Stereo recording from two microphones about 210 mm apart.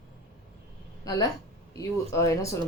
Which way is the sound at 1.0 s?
15° left (ahead or behind).